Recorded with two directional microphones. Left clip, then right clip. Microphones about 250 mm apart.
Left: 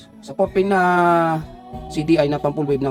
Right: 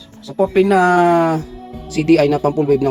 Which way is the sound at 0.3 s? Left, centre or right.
Centre.